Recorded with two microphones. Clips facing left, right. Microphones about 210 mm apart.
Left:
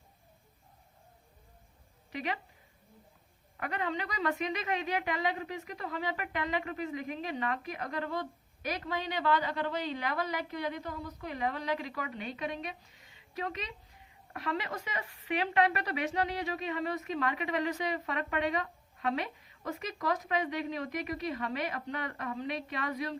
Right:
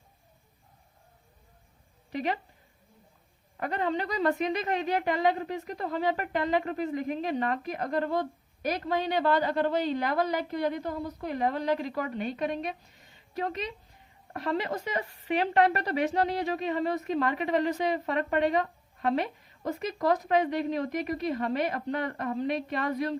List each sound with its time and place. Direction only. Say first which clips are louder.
2.1 s speech: right 6 dB; 35° right (ahead or behind)
3.6 s speech: right 5 dB; 35° right (ahead or behind)
8.2 s a woman's voice: right 7 dB; 50° right (ahead or behind)